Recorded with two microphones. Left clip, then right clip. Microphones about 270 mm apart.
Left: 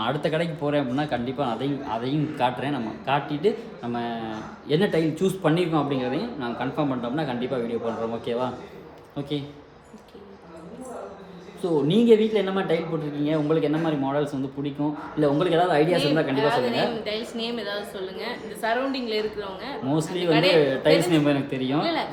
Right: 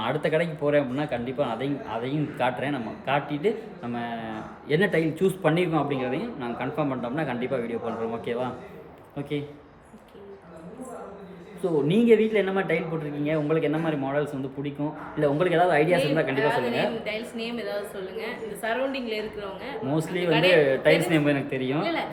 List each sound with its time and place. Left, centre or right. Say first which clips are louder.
0.0 s speech: even; centre
11.6 s speech: left 1 dB; centre